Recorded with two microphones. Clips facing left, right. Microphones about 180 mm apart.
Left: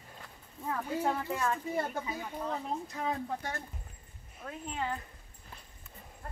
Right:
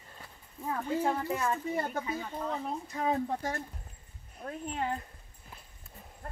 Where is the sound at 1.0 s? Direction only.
10° right (ahead or behind).